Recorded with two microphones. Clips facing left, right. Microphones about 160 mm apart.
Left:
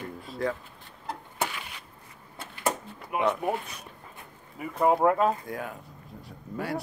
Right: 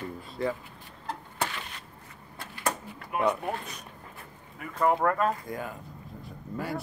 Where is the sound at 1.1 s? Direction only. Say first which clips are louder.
Left 1 dB; 10° left (ahead or behind).